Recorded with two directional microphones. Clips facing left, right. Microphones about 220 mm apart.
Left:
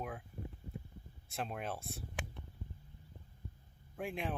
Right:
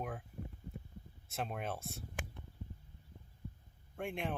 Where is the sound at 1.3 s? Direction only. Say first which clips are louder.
Right 1 dB; centre (ahead or behind).